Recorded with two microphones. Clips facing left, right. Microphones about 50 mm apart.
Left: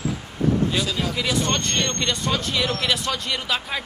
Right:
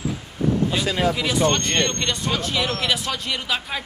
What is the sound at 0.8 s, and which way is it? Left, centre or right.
Speech, right.